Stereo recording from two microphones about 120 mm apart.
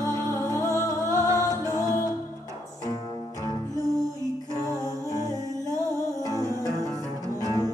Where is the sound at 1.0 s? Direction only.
25° left (ahead or behind).